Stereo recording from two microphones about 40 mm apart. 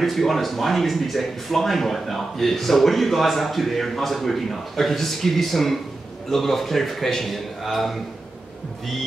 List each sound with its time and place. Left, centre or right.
0.0 s speech: centre